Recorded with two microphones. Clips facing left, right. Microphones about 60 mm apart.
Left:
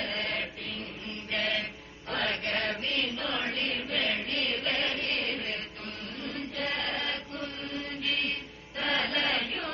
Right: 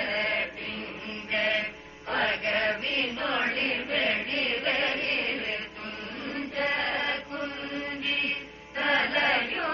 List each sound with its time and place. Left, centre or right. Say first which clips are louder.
0.0 s chant: right 4 dB; right
1.3 s music: right 4 dB; right
2.7 s chant: right 2 dB; right
7.4 s music: right 3 dB; right